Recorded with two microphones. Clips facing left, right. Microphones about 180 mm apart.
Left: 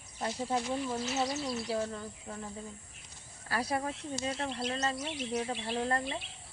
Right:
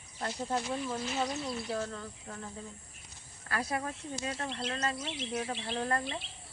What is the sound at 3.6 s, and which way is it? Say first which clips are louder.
Speech: left 3 dB; 30° left (ahead or behind).